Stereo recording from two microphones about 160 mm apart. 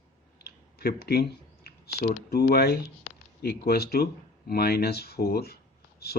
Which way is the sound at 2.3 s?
80° left.